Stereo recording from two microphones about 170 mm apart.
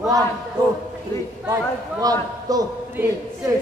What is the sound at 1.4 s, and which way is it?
A man's voice, 20° right (ahead or behind).